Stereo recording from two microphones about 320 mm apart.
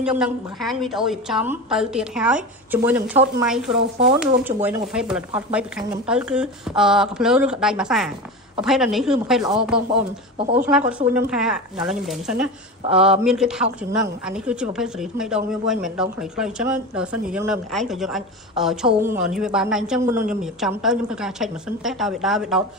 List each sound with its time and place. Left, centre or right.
0.0 s a woman's voice: centre
10.3 s a woman's voice: centre
10.9 s a woman's voice: centre